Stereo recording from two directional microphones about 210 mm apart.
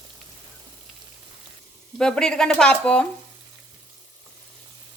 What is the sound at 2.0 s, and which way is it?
Speech, 5° left (ahead or behind).